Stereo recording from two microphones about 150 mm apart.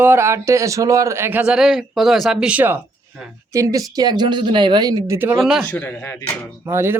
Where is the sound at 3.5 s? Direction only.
20° right (ahead or behind).